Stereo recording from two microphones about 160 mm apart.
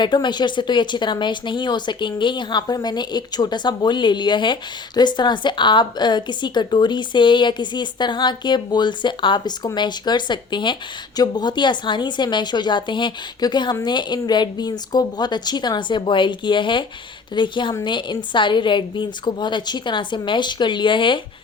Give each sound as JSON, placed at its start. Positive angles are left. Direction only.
{"t": 0.0, "sound": "a woman's voice", "side_deg": 30}